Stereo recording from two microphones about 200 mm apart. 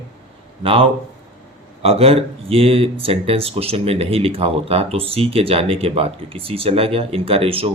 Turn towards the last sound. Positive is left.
turn(degrees=-30)  # may be behind; listen again after turning